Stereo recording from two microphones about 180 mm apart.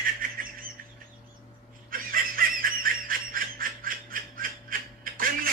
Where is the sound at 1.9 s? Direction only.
55° right (ahead or behind).